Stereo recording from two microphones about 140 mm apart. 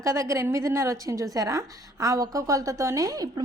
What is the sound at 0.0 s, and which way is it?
A woman's voice, 20° right (ahead or behind).